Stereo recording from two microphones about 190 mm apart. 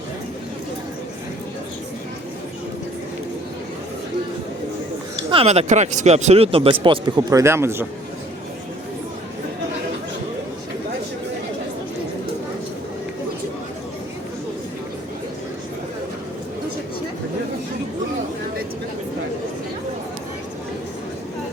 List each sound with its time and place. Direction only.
5.3 s speech: 30° right (ahead or behind); by 7.9 s 15° right (ahead or behind)